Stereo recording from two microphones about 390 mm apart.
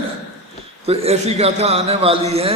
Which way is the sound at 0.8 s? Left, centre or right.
Centre.